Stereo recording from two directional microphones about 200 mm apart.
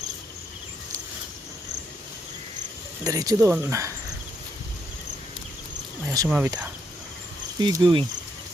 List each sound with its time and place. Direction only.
3.0 s speech: 20° right (ahead or behind)
6.1 s speech: 10° right (ahead or behind)
7.6 s speech: 20° right (ahead or behind)